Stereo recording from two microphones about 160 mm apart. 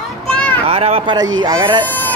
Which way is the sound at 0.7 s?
40° right (ahead or behind).